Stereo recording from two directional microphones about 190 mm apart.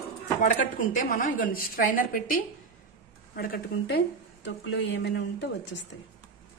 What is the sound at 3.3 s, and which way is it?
Speech, 55° left (ahead or behind).